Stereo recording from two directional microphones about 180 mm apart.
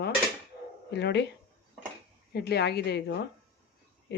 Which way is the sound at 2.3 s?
65° left (ahead or behind).